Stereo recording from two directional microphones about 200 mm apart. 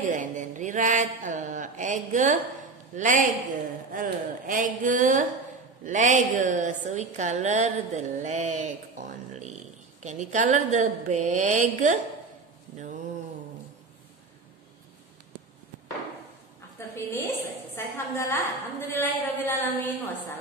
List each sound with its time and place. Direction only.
0.1 s a woman's voice: 40° right (ahead or behind)
12.7 s mantra: 40° right (ahead or behind)
16.9 s a sound: 10° left (ahead or behind)
18.9 s a woman's voice: 10° left (ahead or behind)